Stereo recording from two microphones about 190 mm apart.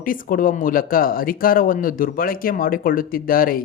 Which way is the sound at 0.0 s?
45° left (ahead or behind).